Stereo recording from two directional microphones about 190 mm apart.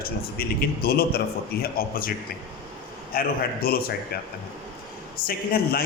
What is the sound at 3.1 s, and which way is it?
Speech, 50° left (ahead or behind).